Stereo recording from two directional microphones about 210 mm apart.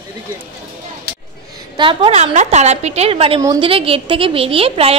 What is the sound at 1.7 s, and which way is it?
A woman's voice, 25° right (ahead or behind).